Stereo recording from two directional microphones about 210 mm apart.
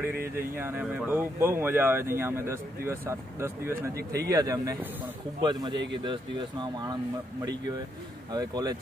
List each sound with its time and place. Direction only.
0.1 s speech: 45° right (ahead or behind)
0.6 s speech: 10° right (ahead or behind)
8.3 s speech: 20° right (ahead or behind)